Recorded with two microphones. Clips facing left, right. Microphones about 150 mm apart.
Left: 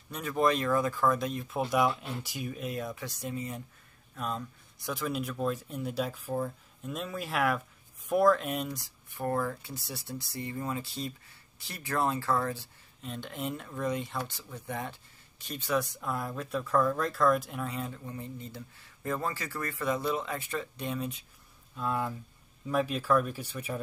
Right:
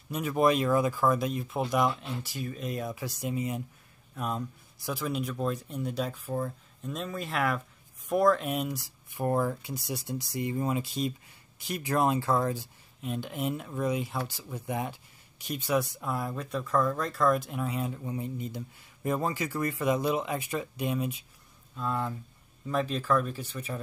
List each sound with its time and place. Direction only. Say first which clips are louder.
0.1 s speech: right 3 dB; 10° right (ahead or behind)
9.1 s speech: right 3 dB; 15° right (ahead or behind)
21.7 s speech: even; 5° left (ahead or behind)